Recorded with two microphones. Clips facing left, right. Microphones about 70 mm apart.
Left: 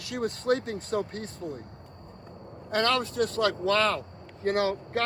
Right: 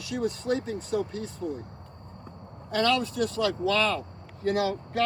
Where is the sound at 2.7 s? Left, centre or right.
Left.